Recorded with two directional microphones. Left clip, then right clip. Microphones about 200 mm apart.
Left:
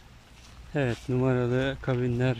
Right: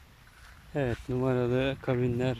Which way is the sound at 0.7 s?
5° left (ahead or behind).